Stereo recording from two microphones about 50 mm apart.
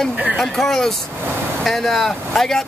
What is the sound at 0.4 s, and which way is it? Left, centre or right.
Speech, centre.